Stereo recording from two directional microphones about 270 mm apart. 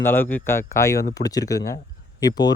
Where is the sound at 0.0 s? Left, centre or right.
Centre.